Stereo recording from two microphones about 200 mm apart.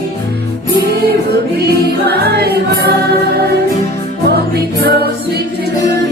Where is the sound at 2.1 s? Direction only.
55° right (ahead or behind).